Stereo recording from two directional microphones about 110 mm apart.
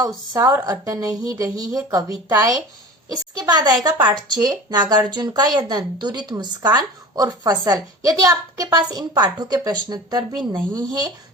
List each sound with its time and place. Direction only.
0.3 s a woman's voice: 30° right (ahead or behind)